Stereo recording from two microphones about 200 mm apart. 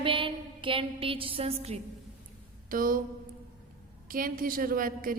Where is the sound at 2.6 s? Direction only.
45° right (ahead or behind).